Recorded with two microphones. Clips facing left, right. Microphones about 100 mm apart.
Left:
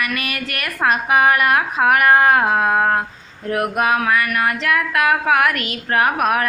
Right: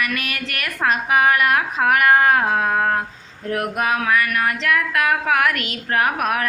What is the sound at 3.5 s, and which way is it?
A woman's voice, 5° left (ahead or behind).